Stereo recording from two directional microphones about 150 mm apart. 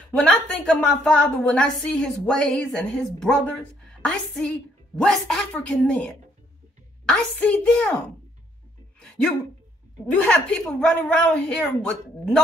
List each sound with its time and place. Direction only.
0.1 s a woman's voice: 10° left (ahead or behind)
9.0 s a sound: 5° left (ahead or behind)
10.1 s a woman's voice: 10° left (ahead or behind)